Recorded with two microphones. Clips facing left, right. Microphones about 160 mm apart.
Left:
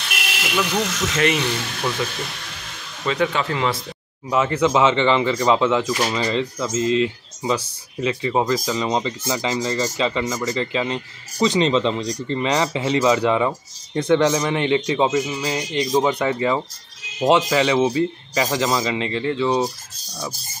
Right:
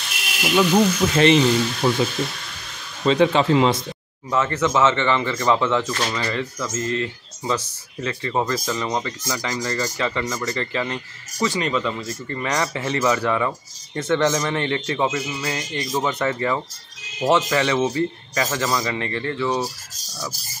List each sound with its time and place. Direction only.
1.1 s a man's voice: 30° right (ahead or behind)
3.1 s a man's voice: 30° right (ahead or behind)
4.3 s speech: 10° left (ahead or behind)